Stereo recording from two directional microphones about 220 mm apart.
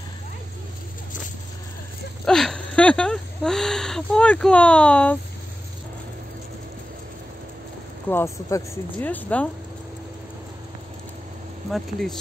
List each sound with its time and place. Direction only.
2.2 s a sound: centre (ahead or behind)
8.1 s speech: 10° left (ahead or behind)
11.7 s speech: centre (ahead or behind)